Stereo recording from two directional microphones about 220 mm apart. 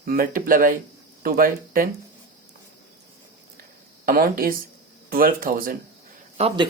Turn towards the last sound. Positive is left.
turn(degrees=-30)  # may be behind; listen again after turning